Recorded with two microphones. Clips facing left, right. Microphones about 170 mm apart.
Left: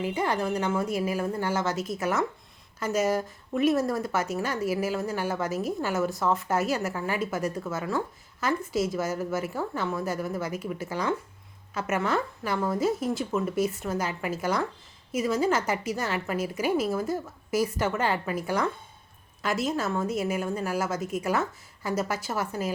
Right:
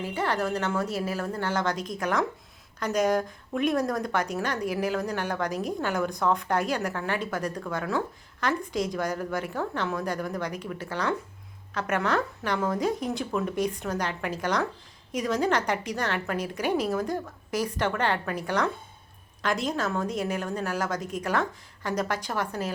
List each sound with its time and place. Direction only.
0.0 s a woman's voice: 10° left (ahead or behind)